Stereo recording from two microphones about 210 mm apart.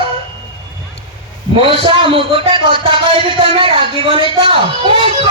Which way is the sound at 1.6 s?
25° right (ahead or behind).